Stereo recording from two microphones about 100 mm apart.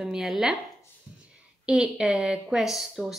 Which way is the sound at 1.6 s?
5° right (ahead or behind).